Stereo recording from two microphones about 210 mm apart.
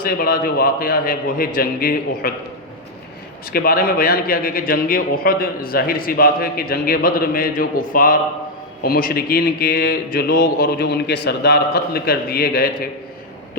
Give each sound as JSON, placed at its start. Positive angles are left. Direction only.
{"t": 0.0, "sound": "a man's voice", "side_deg": 40}
{"t": 3.5, "sound": "a man's voice", "side_deg": 45}